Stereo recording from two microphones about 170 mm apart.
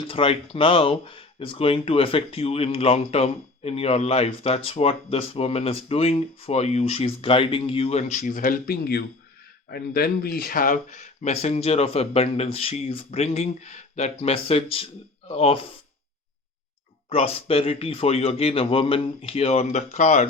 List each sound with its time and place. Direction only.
0.0 s speech: 35° left (ahead or behind)
17.1 s speech: 35° left (ahead or behind)